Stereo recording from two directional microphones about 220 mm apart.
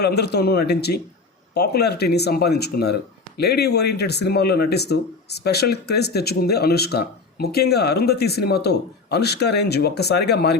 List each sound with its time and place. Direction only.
0.0 s speech: 50° left (ahead or behind)